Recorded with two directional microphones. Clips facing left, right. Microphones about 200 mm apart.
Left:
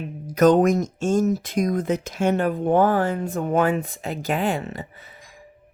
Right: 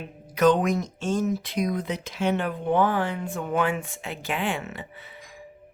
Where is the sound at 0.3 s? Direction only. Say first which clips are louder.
Left 5 dB; 45° left (ahead or behind).